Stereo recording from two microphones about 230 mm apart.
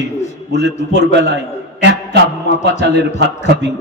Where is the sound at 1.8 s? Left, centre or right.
Right.